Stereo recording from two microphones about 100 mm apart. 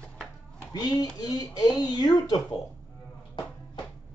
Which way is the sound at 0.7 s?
40° left (ahead or behind).